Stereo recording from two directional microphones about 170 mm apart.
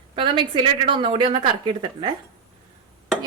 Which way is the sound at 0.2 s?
30° right (ahead or behind).